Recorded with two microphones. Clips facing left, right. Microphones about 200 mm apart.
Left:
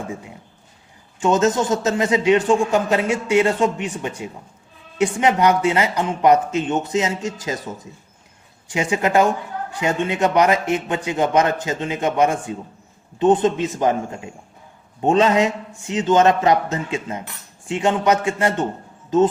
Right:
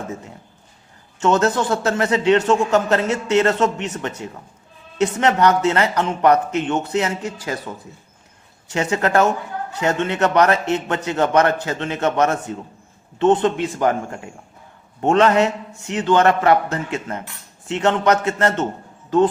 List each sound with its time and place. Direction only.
1.2 s a man's voice: 15° left (ahead or behind)
8.6 s a man's voice: 15° left (ahead or behind)